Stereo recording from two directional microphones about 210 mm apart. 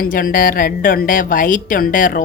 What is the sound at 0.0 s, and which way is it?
A woman's voice, 45° left (ahead or behind).